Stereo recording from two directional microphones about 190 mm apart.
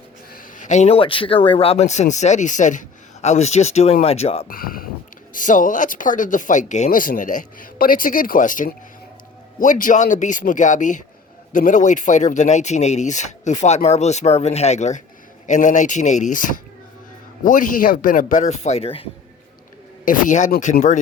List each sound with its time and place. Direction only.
0.3 s speech: 45° left (ahead or behind)
4.4 s speech: 50° left (ahead or behind); by 19.0 s 30° left (ahead or behind)
20.1 s speech: 40° left (ahead or behind)